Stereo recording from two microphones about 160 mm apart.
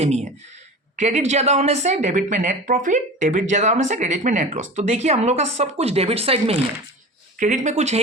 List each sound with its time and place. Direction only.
0.0 s speech: 45° right (ahead or behind)
7.3 s speech: 50° right (ahead or behind)